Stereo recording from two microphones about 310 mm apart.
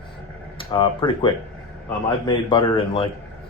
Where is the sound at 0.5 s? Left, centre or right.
Centre.